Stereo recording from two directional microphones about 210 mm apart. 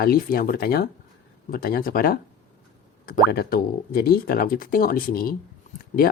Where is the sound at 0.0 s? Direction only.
45° left (ahead or behind).